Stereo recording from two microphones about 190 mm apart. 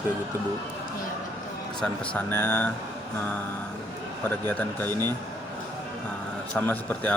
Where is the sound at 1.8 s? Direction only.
10° left (ahead or behind).